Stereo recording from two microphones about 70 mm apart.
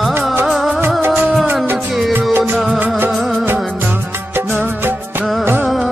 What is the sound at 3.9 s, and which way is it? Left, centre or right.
Music, right.